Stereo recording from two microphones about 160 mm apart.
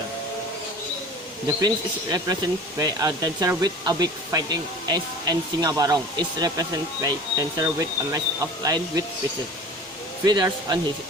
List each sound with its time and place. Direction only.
1.5 s speech: 25° right (ahead or behind)
10.2 s speech: 25° right (ahead or behind)